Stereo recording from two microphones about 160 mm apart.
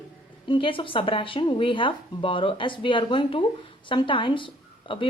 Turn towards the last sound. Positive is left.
turn(degrees=30)  # may be behind; listen again after turning